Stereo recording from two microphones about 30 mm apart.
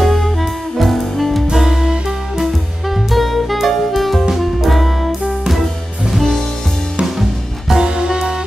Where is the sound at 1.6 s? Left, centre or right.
Right.